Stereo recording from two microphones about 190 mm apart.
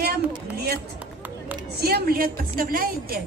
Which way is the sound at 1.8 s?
55° right (ahead or behind).